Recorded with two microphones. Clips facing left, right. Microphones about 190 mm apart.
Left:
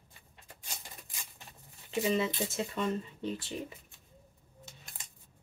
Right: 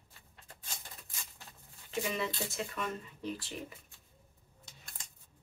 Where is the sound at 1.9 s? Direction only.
20° left (ahead or behind).